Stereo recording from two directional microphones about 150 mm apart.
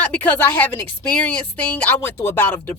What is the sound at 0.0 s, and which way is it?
Speech, 10° left (ahead or behind).